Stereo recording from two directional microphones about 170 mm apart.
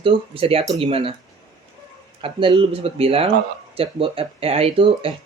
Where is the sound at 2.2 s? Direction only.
30° right (ahead or behind).